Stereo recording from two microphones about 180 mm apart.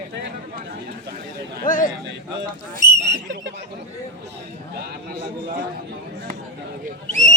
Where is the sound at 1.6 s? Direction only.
45° left (ahead or behind).